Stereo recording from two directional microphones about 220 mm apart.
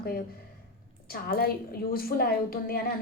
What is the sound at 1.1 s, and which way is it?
A woman's voice, 45° left (ahead or behind).